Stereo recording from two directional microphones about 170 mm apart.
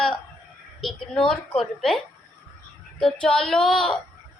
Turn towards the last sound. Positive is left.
turn(degrees=5)  # may be behind; listen again after turning